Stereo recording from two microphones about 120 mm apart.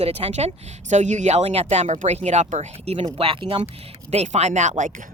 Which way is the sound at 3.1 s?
50° right (ahead or behind).